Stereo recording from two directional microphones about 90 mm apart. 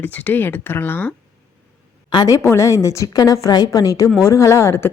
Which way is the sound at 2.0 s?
55° left (ahead or behind).